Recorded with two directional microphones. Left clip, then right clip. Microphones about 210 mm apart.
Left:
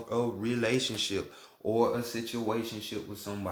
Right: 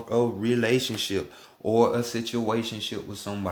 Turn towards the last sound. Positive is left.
turn(degrees=-45)  # may be behind; listen again after turning